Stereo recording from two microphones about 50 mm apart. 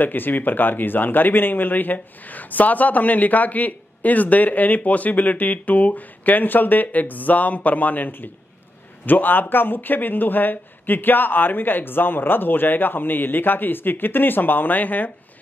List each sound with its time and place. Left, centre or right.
0.0 s speech: left